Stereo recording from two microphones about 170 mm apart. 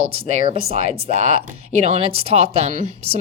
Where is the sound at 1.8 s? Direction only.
35° right (ahead or behind).